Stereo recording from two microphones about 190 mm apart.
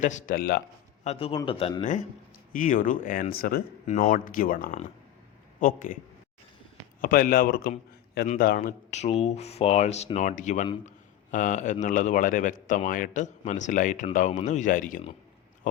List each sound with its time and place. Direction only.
0.0 s speech: 40° left (ahead or behind)
1.0 s speech: 30° left (ahead or behind); by 3.6 s 50° left (ahead or behind)
3.8 s speech: 40° left (ahead or behind)
7.0 s a man's voice: 50° left (ahead or behind)